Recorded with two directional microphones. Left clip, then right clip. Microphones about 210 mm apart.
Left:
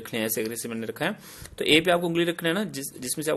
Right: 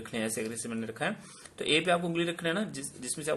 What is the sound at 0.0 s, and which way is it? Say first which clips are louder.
Speech: left 6 dB; 40° left (ahead or behind).